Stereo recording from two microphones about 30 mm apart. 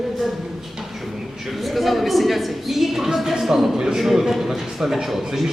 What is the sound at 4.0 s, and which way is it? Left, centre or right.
A man's voice, centre.